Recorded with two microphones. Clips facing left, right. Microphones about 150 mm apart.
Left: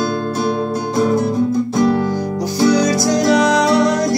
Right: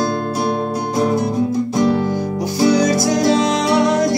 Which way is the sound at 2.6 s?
25° right (ahead or behind).